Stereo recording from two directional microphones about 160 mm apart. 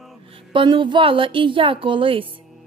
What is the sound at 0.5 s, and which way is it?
A woman's voice, 30° right (ahead or behind).